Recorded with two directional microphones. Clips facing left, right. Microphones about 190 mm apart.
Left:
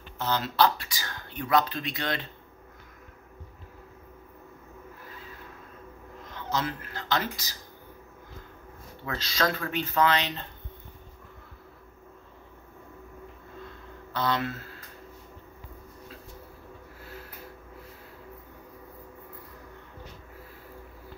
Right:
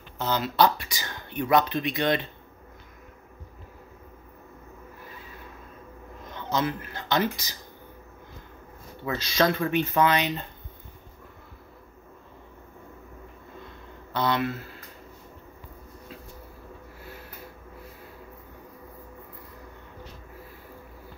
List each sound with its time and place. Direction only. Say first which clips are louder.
0.2 s speech: right 2 dB; 15° right (ahead or behind)
6.3 s speech: right 3 dB; 20° right (ahead or behind)
9.0 s speech: right 5 dB; 15° right (ahead or behind)
14.1 s speech: right 2 dB; 15° right (ahead or behind)